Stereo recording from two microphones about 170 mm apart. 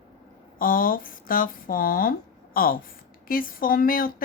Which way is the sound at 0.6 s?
55° left (ahead or behind).